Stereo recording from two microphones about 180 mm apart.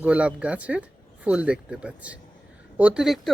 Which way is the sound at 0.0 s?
5° right (ahead or behind).